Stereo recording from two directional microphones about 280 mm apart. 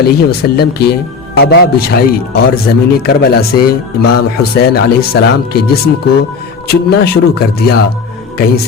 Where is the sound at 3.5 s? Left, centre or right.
Left.